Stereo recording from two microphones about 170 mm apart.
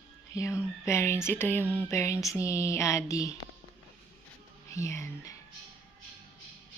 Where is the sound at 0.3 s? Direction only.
15° left (ahead or behind).